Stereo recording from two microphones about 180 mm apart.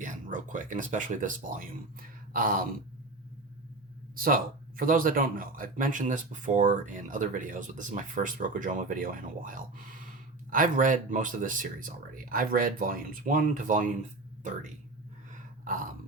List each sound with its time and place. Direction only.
0.0 s speech: 45° right (ahead or behind)
4.1 s speech: 55° right (ahead or behind)
15.3 s a sound: 50° right (ahead or behind)